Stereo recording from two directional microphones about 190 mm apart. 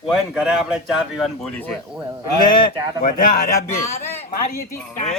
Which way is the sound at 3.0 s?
45° left (ahead or behind).